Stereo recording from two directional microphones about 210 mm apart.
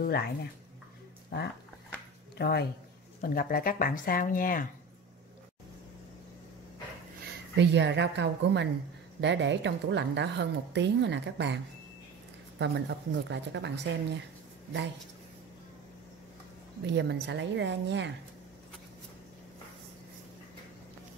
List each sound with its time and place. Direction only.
0.0 s speech: 50° left (ahead or behind)
2.3 s speech: 50° left (ahead or behind)
7.5 s a woman's voice: 55° right (ahead or behind)
16.8 s a woman's voice: 55° right (ahead or behind)